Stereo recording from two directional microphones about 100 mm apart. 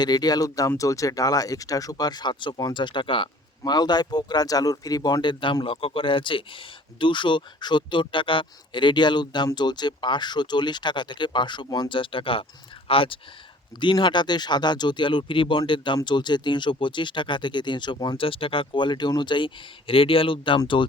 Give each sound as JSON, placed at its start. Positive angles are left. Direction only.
{"t": 0.0, "sound": "speech", "side_deg": 45}
{"t": 3.6, "sound": "speech", "side_deg": 45}
{"t": 5.6, "sound": "speech", "side_deg": 65}
{"t": 13.7, "sound": "speech", "side_deg": 50}
{"t": 18.2, "sound": "speech", "side_deg": 60}
{"t": 19.9, "sound": "speech", "side_deg": 65}